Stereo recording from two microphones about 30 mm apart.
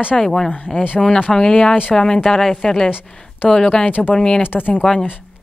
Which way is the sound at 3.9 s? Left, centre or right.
Left.